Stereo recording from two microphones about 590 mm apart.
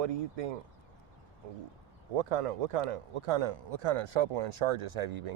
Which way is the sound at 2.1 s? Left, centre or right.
Right.